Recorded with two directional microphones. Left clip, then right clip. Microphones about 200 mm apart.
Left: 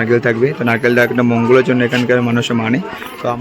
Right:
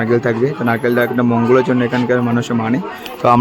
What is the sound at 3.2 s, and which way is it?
Speech, 25° right (ahead or behind).